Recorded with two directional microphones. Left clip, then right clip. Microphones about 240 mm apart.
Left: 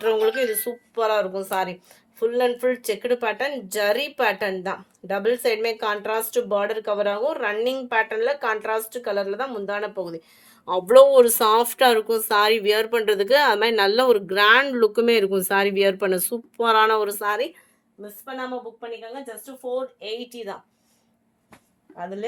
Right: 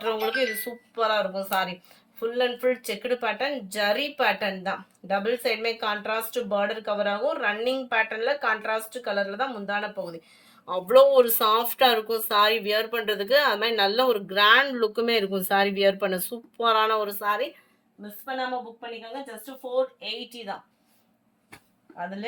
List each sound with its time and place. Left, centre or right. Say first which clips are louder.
0.0 s speech: left 5 dB; left
20.0 s speech: left 3 dB; left